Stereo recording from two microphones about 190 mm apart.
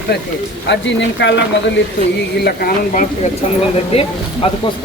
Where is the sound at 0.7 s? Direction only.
65° left (ahead or behind).